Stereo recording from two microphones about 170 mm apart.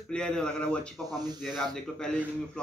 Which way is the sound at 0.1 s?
5° left (ahead or behind).